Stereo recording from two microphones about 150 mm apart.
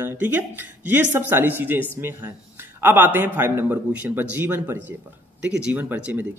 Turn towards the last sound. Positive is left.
turn(degrees=-10)  # may be behind; listen again after turning